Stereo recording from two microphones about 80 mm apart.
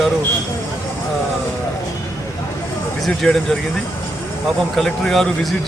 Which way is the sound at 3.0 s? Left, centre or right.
Centre.